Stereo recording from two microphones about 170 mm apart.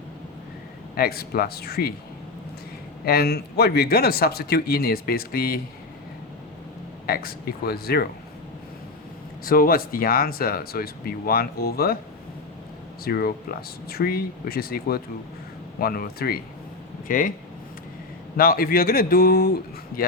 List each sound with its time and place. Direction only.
0.9 s speech: 65° left (ahead or behind)
3.1 s speech: 65° left (ahead or behind)
7.1 s speech: 60° left (ahead or behind)
9.4 s speech: 60° left (ahead or behind)
13.1 s speech: 60° left (ahead or behind)
18.3 s speech: 60° left (ahead or behind)